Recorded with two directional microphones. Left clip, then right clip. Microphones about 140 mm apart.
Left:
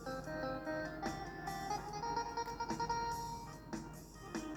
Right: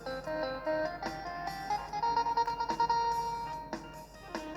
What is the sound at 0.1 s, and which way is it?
Music, 30° left (ahead or behind).